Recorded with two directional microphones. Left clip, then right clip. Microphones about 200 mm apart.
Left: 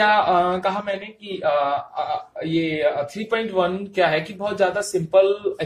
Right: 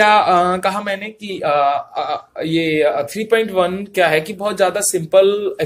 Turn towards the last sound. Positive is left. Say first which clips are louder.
# right 4 dB
turn(degrees=-40)  # may be behind; listen again after turning